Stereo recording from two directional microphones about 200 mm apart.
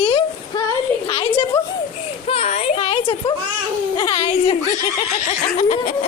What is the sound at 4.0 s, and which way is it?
Speech, 25° left (ahead or behind).